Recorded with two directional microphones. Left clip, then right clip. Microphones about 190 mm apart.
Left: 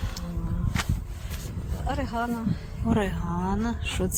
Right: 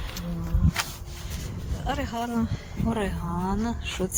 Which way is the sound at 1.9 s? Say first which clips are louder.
Even; 45° right (ahead or behind).